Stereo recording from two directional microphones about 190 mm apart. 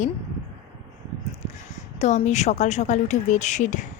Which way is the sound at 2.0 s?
40° left (ahead or behind).